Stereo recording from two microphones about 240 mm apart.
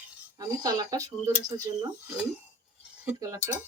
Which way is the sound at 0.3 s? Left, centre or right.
Centre.